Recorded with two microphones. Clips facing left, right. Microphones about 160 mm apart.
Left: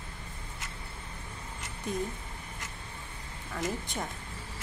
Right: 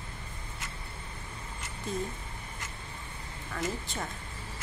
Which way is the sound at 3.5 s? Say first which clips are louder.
Left 1 dB; 15° left (ahead or behind).